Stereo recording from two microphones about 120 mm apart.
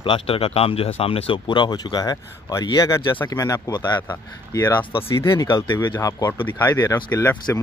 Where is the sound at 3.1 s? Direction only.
15° left (ahead or behind).